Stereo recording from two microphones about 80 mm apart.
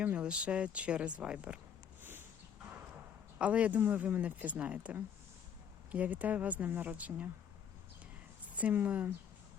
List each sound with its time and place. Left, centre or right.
0.0 s speech: centre
2.0 s a sound: right
3.3 s speech: centre
8.5 s speech: right